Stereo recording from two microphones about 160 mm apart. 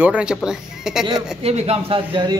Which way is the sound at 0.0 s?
5° right (ahead or behind).